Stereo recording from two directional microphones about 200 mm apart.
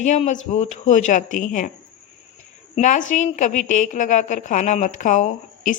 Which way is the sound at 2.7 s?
40° left (ahead or behind).